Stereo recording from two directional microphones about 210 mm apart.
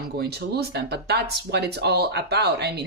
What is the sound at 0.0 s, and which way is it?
A woman's voice, 50° right (ahead or behind).